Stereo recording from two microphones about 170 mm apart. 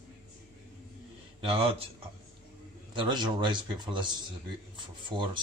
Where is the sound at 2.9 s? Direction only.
25° right (ahead or behind).